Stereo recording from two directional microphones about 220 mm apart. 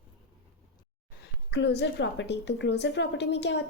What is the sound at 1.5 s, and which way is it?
A woman's voice, 50° left (ahead or behind).